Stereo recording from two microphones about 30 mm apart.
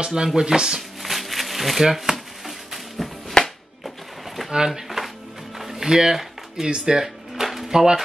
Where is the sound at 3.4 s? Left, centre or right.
Left.